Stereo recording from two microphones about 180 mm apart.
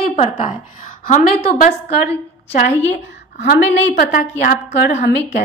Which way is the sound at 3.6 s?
90° left.